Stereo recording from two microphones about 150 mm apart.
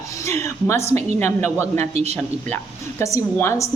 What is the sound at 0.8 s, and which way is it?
Speech, 45° right (ahead or behind).